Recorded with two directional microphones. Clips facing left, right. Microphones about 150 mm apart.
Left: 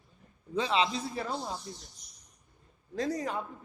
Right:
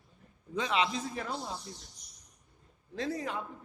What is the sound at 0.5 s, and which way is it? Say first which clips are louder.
Speech: left 2 dB; 30° left (ahead or behind).